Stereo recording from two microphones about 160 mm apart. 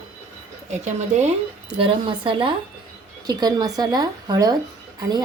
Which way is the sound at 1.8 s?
30° right (ahead or behind).